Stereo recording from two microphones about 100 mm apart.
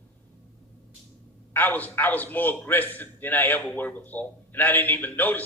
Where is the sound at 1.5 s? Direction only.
15° left (ahead or behind).